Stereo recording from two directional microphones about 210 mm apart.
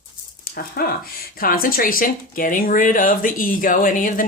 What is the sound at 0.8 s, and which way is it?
Speech, 45° left (ahead or behind).